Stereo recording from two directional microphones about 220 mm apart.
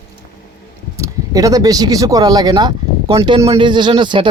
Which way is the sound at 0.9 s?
15° right (ahead or behind).